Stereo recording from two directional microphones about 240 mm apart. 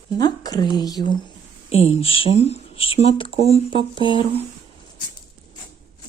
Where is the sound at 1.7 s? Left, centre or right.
Left.